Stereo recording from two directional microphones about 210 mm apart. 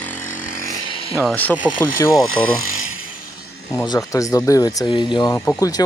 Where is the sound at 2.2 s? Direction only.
80° left.